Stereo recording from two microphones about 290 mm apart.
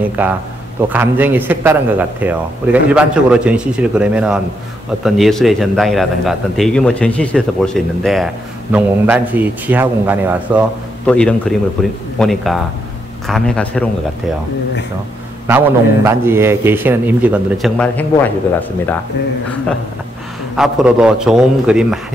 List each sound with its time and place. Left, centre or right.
0.2 s a man's voice: centre
15.4 s a man's voice: centre
20.5 s a man's voice: centre